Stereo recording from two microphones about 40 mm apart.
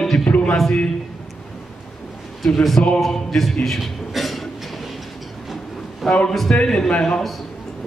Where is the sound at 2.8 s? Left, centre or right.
Centre.